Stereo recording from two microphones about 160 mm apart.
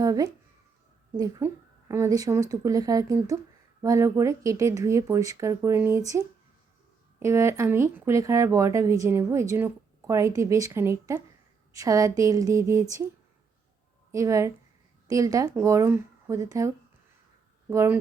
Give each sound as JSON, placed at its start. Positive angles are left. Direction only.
{"t": 0.0, "sound": "speech", "side_deg": -20}
{"t": 14.1, "sound": "speech", "side_deg": -20}